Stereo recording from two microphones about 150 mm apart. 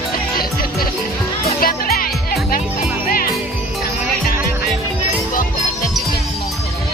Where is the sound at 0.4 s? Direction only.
80° left.